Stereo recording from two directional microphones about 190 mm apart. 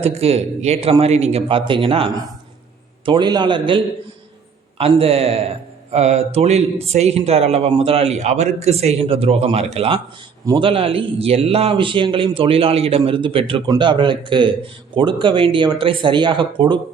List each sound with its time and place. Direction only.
0.0 s speech: 30° right (ahead or behind)
3.1 s a man's voice: 25° right (ahead or behind)